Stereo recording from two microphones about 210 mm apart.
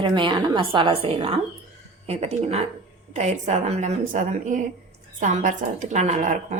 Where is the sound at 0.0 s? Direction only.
25° right (ahead or behind).